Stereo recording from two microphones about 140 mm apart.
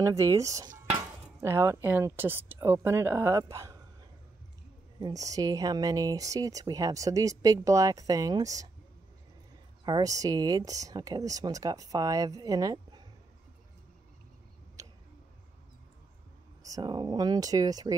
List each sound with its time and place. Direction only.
0.0 s speech: 20° right (ahead or behind)
5.0 s speech: 25° right (ahead or behind)
9.8 s speech: 25° right (ahead or behind)
14.8 s a sound: 25° right (ahead or behind)
16.6 s speech: 30° right (ahead or behind)